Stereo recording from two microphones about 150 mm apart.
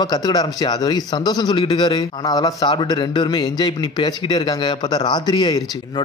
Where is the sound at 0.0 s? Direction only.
25° left (ahead or behind).